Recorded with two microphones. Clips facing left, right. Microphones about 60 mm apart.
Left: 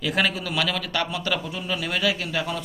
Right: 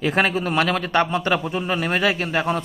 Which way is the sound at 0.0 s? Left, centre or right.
Right.